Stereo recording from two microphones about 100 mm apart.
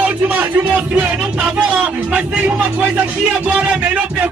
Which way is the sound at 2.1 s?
15° right (ahead or behind).